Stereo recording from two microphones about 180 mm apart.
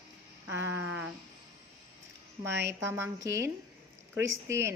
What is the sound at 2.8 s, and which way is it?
Speech, 15° right (ahead or behind).